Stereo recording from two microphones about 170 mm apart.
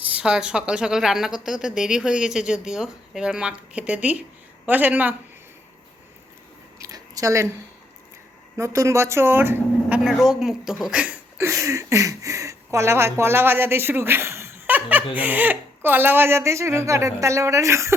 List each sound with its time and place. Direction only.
0.0 s a woman's voice: 5° right (ahead or behind)
6.7 s chewing: 20° right (ahead or behind)
8.5 s speech: 15° right (ahead or behind)